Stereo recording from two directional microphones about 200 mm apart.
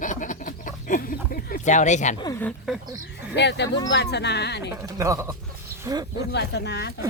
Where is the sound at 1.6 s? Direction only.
35° left (ahead or behind).